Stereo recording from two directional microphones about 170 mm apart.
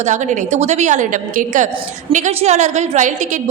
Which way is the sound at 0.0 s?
45° right (ahead or behind).